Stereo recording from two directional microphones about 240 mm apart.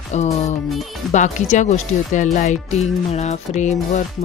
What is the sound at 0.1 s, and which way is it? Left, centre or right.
Music, left.